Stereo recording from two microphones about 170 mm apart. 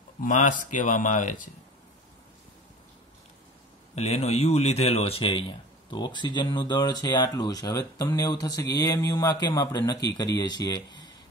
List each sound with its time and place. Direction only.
0.2 s speech: 50° left (ahead or behind)
3.9 s a man's voice: 40° left (ahead or behind); by 10.8 s 25° left (ahead or behind)